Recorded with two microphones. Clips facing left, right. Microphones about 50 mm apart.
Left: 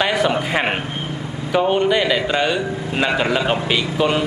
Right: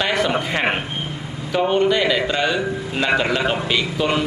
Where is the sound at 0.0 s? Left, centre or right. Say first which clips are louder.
Left 2 dB; centre.